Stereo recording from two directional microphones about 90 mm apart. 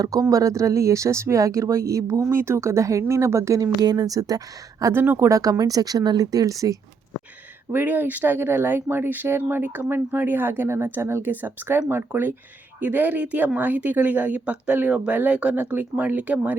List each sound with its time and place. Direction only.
0.0 s speech: 40° right (ahead or behind)
3.8 s speech: 45° right (ahead or behind)
4.9 s speech: 25° right (ahead or behind)
5.3 s speech: 40° right (ahead or behind)
7.7 s speech: 20° right (ahead or behind)